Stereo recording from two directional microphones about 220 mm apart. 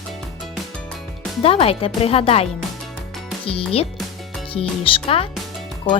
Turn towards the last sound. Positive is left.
turn(degrees=5)  # may be behind; listen again after turning